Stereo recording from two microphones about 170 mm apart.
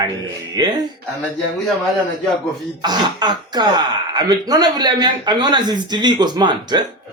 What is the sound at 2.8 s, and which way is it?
Speech, 25° right (ahead or behind).